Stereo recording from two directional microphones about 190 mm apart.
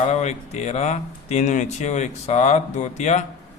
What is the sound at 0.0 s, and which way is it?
Speech, 35° left (ahead or behind).